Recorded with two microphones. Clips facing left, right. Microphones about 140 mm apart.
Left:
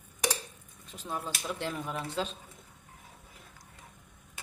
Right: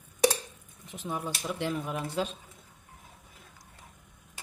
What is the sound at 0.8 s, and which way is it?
Speech, 20° right (ahead or behind).